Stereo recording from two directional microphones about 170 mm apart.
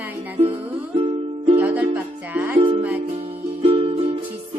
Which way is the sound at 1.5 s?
10° right (ahead or behind).